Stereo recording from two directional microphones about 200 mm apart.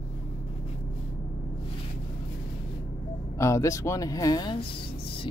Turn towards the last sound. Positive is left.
turn(degrees=20)  # may be behind; listen again after turning